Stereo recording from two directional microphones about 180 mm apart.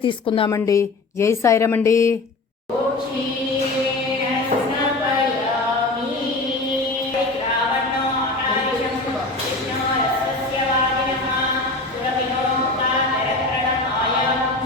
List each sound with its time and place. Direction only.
0.0 s a woman's voice: 30° left (ahead or behind)